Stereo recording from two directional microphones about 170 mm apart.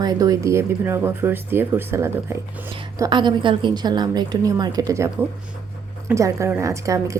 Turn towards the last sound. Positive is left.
turn(degrees=-20)  # may be behind; listen again after turning